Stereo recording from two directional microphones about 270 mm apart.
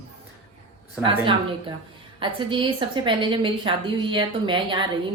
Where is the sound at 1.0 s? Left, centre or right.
Centre.